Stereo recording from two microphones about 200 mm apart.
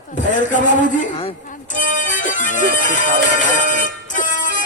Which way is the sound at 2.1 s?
40° left (ahead or behind).